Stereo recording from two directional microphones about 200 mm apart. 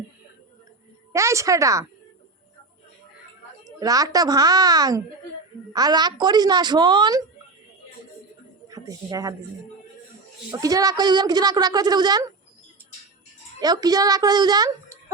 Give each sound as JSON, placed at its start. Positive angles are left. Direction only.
{"t": 1.1, "sound": "a woman's voice", "side_deg": -15}
{"t": 3.8, "sound": "a woman's voice", "side_deg": -20}
{"t": 8.7, "sound": "a woman's voice", "side_deg": -15}
{"t": 10.5, "sound": "a woman's voice", "side_deg": -20}
{"t": 13.6, "sound": "a woman's voice", "side_deg": -20}